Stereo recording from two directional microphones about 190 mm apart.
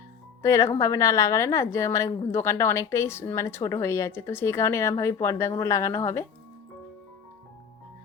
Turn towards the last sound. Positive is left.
turn(degrees=15)  # may be behind; listen again after turning